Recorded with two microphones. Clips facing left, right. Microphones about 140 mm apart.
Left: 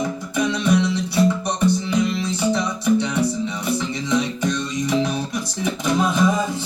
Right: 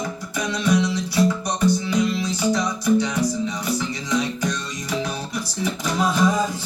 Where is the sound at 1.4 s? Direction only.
25° left (ahead or behind).